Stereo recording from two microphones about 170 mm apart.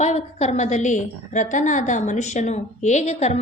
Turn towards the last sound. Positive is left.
turn(degrees=40)  # may be behind; listen again after turning